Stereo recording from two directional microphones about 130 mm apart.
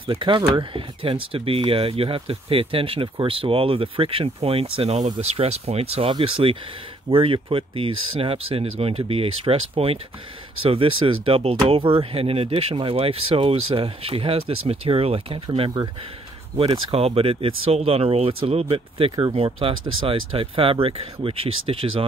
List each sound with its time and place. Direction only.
0.0 s speech: 40° right (ahead or behind)